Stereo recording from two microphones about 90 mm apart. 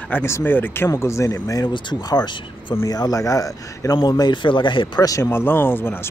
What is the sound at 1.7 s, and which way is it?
Speech, 55° left (ahead or behind).